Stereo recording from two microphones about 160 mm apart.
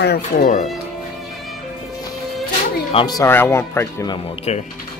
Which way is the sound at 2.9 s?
25° left (ahead or behind).